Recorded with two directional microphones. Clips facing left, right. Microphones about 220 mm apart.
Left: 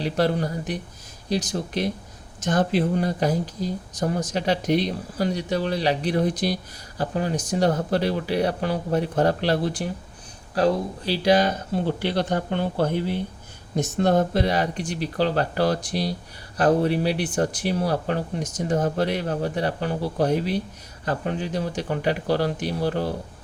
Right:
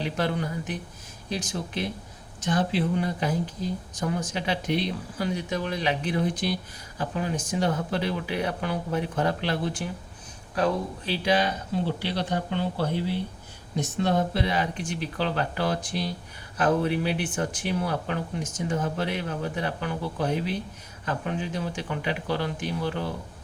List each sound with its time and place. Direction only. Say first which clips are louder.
0.0 s speech: left 5 dB; 35° left (ahead or behind)